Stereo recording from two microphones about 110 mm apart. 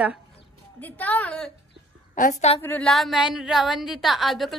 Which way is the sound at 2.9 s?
Centre (ahead or behind).